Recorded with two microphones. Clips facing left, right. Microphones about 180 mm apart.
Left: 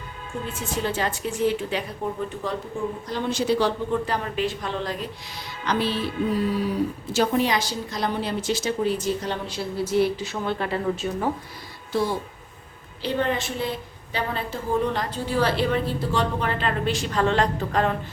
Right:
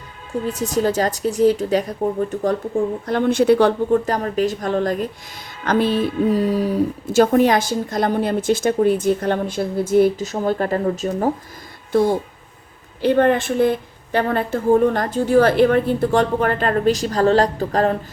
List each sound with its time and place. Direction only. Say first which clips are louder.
0.4 s a woman's voice: right 9 dB; 40° right (ahead or behind)
3.1 s a woman's voice: right 9 dB; 55° right (ahead or behind); by 17.9 s 35° right (ahead or behind)